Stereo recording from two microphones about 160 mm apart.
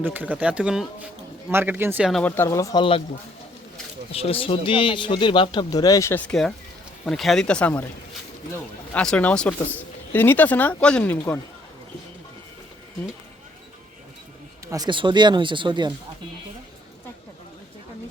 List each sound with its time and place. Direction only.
0.0 s speech: 10° right (ahead or behind)
2.2 s speech: 15° left (ahead or behind)
4.1 s a man's voice: 35° left (ahead or behind); by 11.3 s 10° left (ahead or behind)
14.7 s speech: 25° right (ahead or behind)